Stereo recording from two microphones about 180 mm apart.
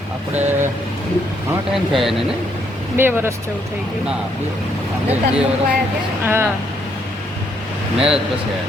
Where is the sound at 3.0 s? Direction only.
10° right (ahead or behind).